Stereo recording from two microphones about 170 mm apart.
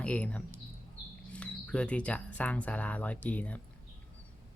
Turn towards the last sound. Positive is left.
turn(degrees=10)  # may be behind; listen again after turning